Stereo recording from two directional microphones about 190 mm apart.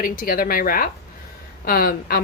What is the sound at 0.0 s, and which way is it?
A woman's voice, 50° left (ahead or behind).